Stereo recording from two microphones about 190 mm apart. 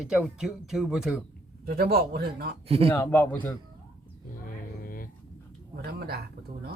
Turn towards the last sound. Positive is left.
turn(degrees=-55)  # may be behind; listen again after turning